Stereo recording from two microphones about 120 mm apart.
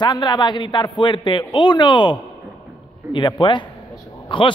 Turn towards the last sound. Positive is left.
turn(degrees=45)  # may be behind; listen again after turning